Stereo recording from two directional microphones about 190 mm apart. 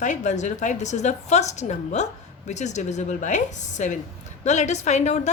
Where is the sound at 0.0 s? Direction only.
40° left (ahead or behind).